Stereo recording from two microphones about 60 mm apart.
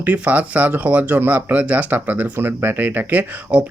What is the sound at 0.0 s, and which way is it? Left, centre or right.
Speech, right.